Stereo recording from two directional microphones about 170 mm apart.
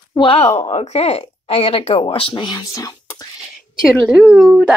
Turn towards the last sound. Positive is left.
turn(degrees=-5)  # may be behind; listen again after turning